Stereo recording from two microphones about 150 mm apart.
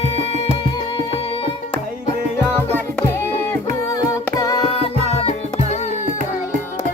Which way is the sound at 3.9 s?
20° left (ahead or behind).